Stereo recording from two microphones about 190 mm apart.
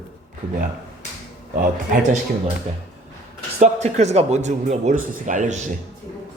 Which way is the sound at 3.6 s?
35° right (ahead or behind).